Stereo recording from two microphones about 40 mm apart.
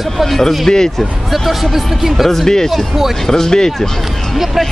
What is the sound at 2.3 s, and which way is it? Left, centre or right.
Speech, centre.